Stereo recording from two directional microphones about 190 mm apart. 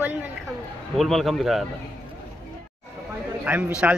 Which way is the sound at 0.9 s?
Centre (ahead or behind).